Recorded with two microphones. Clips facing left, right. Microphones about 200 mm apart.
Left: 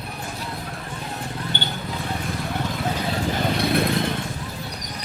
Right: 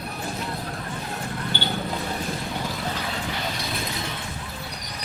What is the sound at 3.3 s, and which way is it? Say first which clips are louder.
Vehicle: left 9 dB; 55° left (ahead or behind).